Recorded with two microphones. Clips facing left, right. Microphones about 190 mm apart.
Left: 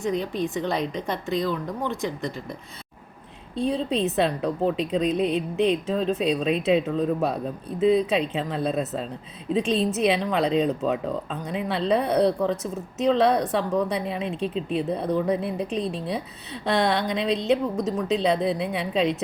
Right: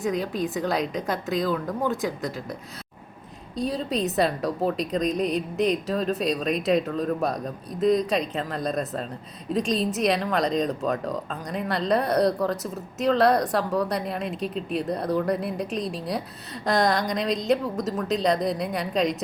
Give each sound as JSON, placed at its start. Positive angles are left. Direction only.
{"t": 0.0, "sound": "a woman's voice", "side_deg": 0}
{"t": 4.0, "sound": "a woman's voice", "side_deg": 0}
{"t": 5.0, "sound": "a sound", "side_deg": -40}
{"t": 5.9, "sound": "a woman's voice", "side_deg": 0}